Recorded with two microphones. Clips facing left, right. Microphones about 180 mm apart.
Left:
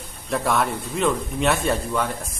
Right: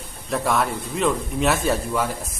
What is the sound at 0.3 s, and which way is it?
A man's voice, centre (ahead or behind).